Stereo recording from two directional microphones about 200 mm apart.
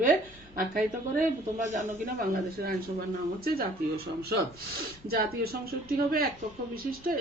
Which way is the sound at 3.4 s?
50° right (ahead or behind).